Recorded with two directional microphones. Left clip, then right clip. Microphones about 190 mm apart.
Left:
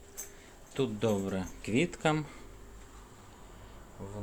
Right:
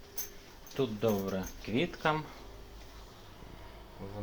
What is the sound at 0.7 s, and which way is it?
Speech, 35° left (ahead or behind).